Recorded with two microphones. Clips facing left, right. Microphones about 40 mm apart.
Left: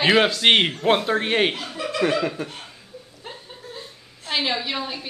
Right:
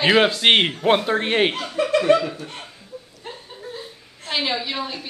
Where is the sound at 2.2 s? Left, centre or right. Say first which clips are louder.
Left 1 dB; left.